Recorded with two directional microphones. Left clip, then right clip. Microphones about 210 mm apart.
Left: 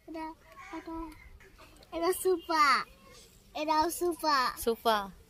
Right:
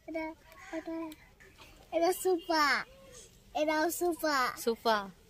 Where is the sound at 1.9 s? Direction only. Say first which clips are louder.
Right 1 dB; 20° right (ahead or behind).